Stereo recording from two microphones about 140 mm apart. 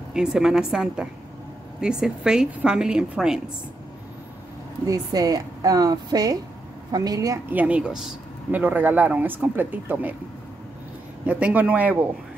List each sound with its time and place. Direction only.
0.1 s a woman's voice: 5° right (ahead or behind)
4.8 s a woman's voice: 25° right (ahead or behind)
7.5 s speech: 10° right (ahead or behind)
11.2 s speech: 10° right (ahead or behind)